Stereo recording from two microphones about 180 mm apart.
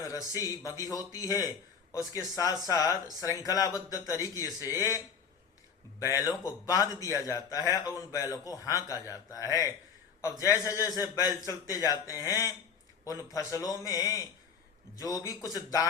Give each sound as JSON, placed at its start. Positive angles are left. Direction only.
{"t": 0.0, "sound": "a man's voice", "side_deg": 20}